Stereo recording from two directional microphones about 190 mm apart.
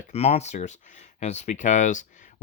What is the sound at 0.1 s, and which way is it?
Speech, 30° left (ahead or behind).